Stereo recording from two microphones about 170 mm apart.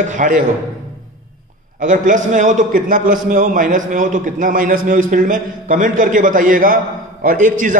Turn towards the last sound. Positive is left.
turn(degrees=-50)  # may be behind; listen again after turning